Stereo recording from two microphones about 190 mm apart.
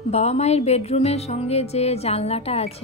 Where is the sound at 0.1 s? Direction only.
35° left (ahead or behind).